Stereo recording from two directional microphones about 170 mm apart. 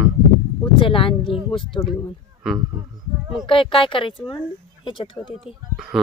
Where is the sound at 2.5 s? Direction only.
Centre (ahead or behind).